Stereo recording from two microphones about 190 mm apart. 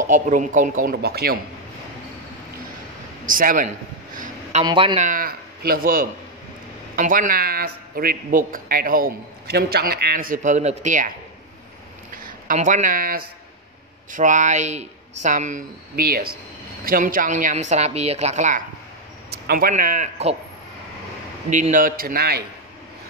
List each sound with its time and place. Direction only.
0.0 s a man's voice: 40° right (ahead or behind)
3.3 s a man's voice: 45° right (ahead or behind)
4.2 s a sound: 40° right (ahead or behind)
4.6 s speech: 30° right (ahead or behind)
5.0 s a man's voice: 45° right (ahead or behind)
12.2 s a woman's voice: 45° right (ahead or behind)
19.3 s a man's voice: 55° right (ahead or behind); by 20.3 s 35° right (ahead or behind)
21.5 s a man's voice: 40° right (ahead or behind)